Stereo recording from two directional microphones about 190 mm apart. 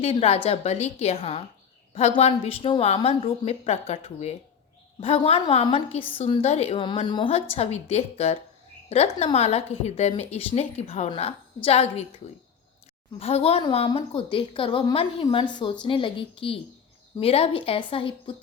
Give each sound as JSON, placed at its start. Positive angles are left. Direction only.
{"t": 0.0, "sound": "a woman's voice", "side_deg": 30}
{"t": 13.1, "sound": "speech", "side_deg": 30}